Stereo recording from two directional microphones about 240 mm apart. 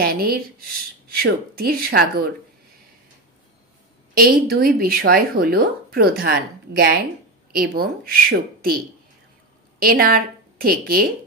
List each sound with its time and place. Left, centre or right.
0.0 s a woman's voice: right
4.2 s a woman's voice: right
9.8 s a woman's voice: right